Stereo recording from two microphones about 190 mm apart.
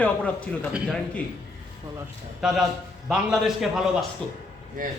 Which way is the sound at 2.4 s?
5° right (ahead or behind).